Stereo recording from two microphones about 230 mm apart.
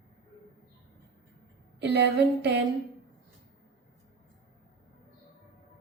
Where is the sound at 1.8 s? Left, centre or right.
Right.